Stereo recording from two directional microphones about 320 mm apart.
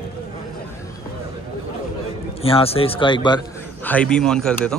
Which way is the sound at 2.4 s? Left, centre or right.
Centre.